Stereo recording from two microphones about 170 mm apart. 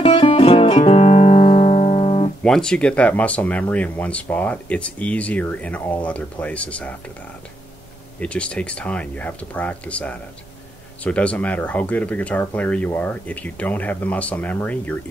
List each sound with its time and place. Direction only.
0.0 s guitar: 30° left (ahead or behind)
2.4 s speech: 5° left (ahead or behind)
8.2 s speech: 5° left (ahead or behind)